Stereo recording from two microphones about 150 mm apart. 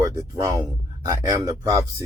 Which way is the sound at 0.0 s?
20° right (ahead or behind).